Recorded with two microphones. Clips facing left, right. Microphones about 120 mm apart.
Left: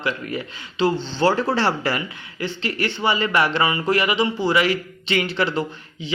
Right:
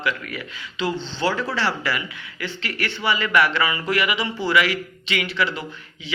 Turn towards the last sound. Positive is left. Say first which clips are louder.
# left 3 dB
turn(degrees=35)  # may be behind; listen again after turning